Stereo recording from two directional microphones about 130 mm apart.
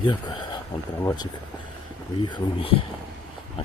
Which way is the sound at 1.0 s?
25° left (ahead or behind).